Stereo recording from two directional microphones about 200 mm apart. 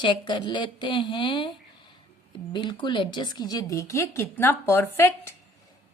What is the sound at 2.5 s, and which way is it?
A woman's voice, 25° left (ahead or behind).